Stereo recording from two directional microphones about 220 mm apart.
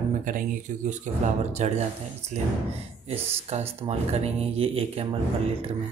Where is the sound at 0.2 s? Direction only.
35° right (ahead or behind).